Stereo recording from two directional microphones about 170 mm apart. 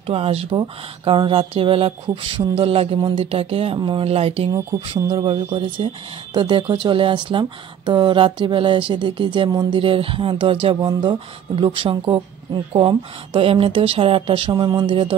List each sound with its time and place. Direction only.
0.0 s speech: 35° right (ahead or behind)
4.5 s speech: 25° right (ahead or behind)